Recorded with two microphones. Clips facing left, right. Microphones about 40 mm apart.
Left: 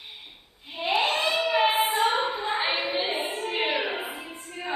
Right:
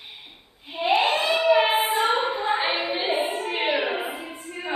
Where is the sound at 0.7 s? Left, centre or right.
Centre.